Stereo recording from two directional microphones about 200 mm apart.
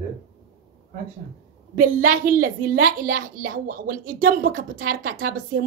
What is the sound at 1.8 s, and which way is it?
Speech, 45° right (ahead or behind).